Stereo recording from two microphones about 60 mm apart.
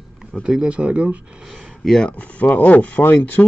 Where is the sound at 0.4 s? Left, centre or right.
Centre.